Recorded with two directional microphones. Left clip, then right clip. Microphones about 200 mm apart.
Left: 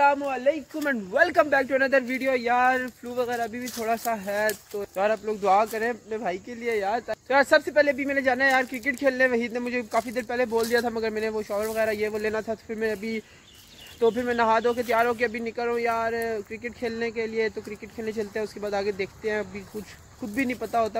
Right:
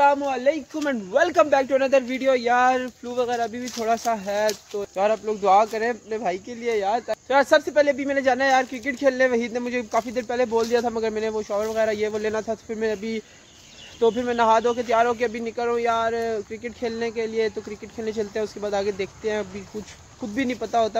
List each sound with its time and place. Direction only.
0.0 s speech: 10° right (ahead or behind)